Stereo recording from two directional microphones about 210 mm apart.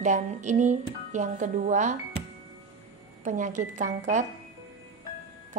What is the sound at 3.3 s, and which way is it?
A woman's voice, 35° right (ahead or behind).